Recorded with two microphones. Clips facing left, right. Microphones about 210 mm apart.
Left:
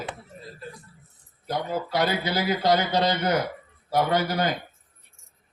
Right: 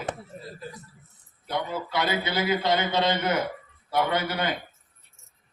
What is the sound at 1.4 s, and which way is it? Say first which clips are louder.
A man's voice: left 2 dB; 40° left (ahead or behind).